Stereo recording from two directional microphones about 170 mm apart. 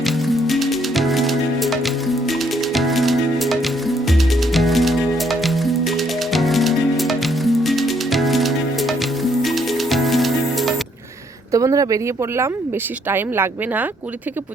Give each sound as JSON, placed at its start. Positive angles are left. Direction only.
{"t": 0.0, "sound": "music", "side_deg": 0}
{"t": 11.5, "sound": "speech", "side_deg": -20}
{"t": 13.1, "sound": "speech", "side_deg": -15}